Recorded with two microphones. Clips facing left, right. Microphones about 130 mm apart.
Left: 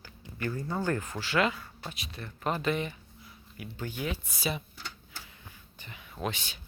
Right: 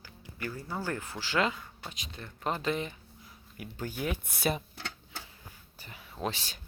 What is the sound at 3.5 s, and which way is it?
Speech, 40° right (ahead or behind).